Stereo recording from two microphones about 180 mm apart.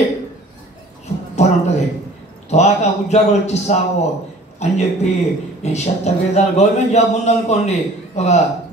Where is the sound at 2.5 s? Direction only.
40° left (ahead or behind).